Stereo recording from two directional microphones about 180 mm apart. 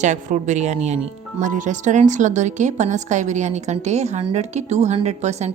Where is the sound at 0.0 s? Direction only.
40° right (ahead or behind).